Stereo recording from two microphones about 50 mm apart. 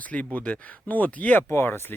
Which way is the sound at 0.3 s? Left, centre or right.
Left.